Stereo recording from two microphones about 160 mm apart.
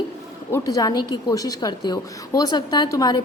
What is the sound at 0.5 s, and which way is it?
A woman's voice, 20° left (ahead or behind).